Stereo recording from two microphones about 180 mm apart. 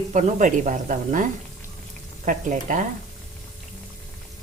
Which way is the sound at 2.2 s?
45° right (ahead or behind).